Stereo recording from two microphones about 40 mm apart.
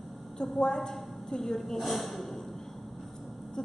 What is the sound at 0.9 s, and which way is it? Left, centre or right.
A woman's voice, centre.